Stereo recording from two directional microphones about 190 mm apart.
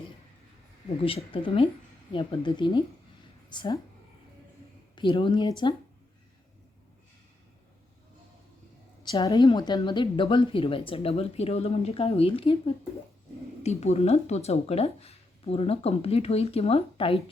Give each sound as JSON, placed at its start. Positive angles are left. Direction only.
{"t": 1.0, "sound": "a woman's voice", "side_deg": 30}
{"t": 4.9, "sound": "a woman's voice", "side_deg": 25}
{"t": 9.0, "sound": "a woman's voice", "side_deg": 20}